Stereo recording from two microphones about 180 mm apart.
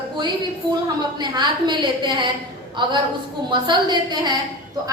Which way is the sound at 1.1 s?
25° right (ahead or behind).